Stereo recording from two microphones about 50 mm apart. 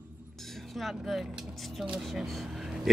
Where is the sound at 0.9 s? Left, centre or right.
Centre.